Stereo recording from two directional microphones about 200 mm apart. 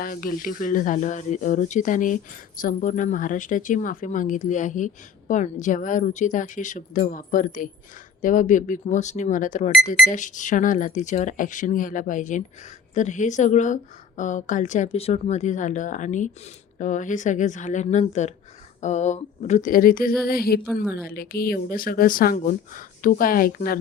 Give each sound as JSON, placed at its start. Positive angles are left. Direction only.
{"t": 0.0, "sound": "speech", "side_deg": 45}